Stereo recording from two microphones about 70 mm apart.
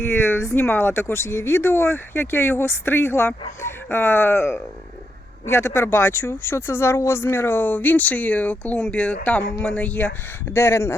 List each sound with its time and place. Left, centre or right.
0.1 s speech: left
10.5 s speech: left